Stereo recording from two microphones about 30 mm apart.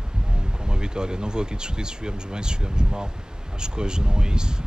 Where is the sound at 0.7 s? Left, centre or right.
Right.